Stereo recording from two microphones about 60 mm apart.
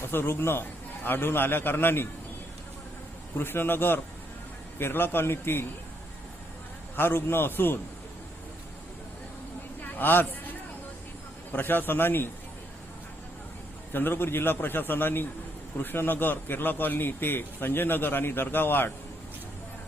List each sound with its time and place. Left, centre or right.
0.0 s speech: left
3.3 s speech: left
6.9 s speech: left
9.8 s a sound: left
11.5 s speech: left
13.9 s speech: left